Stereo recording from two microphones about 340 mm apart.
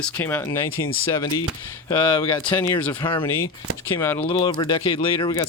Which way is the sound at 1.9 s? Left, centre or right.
Centre.